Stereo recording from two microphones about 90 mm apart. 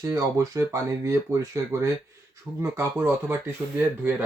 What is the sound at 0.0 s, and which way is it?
Speech, 40° right (ahead or behind).